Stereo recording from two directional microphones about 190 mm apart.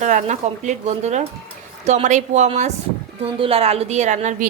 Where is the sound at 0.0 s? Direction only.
40° right (ahead or behind).